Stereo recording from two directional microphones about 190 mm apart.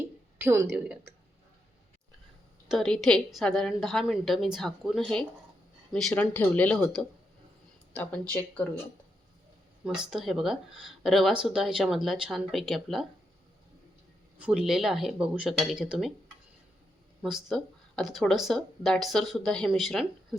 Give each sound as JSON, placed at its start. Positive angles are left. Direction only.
{"t": 0.3, "sound": "a woman's voice", "side_deg": -15}
{"t": 2.6, "sound": "speech", "side_deg": 0}
{"t": 9.8, "sound": "speech", "side_deg": -5}
{"t": 14.3, "sound": "speech", "side_deg": -5}
{"t": 17.2, "sound": "speech", "side_deg": 0}